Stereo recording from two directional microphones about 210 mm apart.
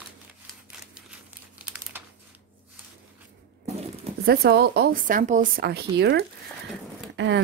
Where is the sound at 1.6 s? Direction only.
10° right (ahead or behind).